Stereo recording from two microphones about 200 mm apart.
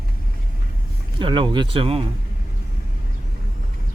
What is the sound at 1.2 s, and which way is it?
Speech, 25° right (ahead or behind).